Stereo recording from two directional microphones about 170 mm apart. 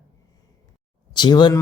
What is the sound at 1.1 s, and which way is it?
Speech, 25° left (ahead or behind).